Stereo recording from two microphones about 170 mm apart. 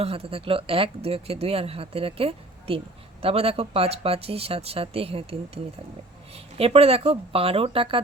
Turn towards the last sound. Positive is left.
turn(degrees=-35)  # may be behind; listen again after turning